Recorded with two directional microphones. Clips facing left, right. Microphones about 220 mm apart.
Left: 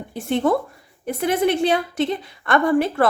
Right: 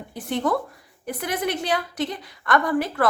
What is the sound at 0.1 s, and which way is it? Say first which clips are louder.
A woman's voice: left 4 dB; 25° left (ahead or behind).